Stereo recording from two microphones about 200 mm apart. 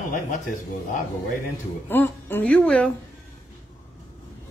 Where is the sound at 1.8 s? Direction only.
10° left (ahead or behind).